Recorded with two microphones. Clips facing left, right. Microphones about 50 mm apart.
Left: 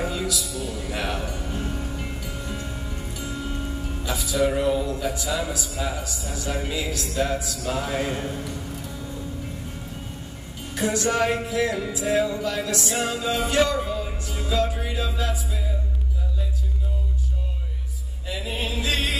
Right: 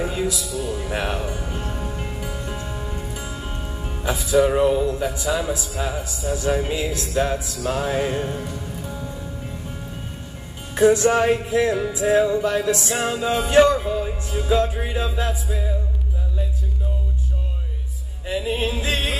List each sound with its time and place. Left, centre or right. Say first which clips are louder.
0.0 s music: right 3 dB; right
4.6 s a man's voice: right 5 dB; right
7.2 s music: right 3 dB; right
7.9 s a man's voice: right 4 dB; centre
10.7 s music: right 8 dB; right
18.2 s music: right 6 dB; right